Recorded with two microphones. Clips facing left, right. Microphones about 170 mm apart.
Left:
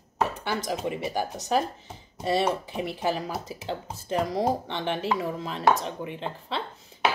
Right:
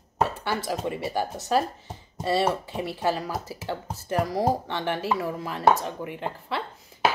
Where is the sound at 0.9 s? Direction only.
15° left (ahead or behind).